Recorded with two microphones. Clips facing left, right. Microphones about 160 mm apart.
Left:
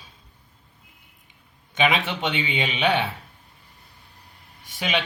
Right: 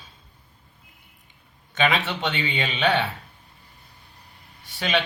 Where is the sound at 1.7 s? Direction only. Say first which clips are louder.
Left 1 dB; 15° left (ahead or behind).